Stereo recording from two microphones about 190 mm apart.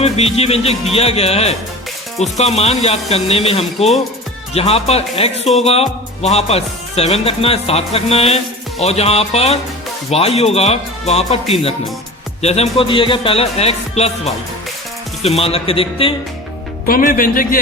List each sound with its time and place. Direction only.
0.0 s speech: 30° left (ahead or behind)
16.8 s a man's voice: 45° left (ahead or behind)